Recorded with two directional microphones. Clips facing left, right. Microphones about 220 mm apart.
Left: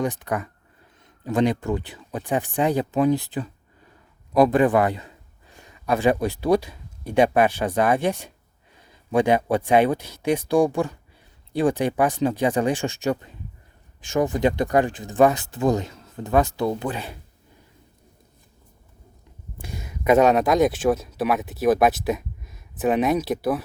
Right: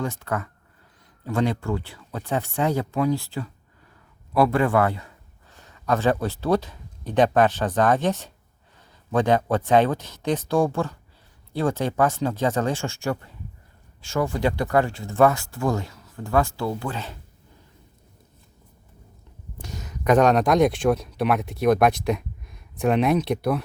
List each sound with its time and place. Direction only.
0.0 s a man's voice: 15° left (ahead or behind)
19.6 s speech: 10° left (ahead or behind)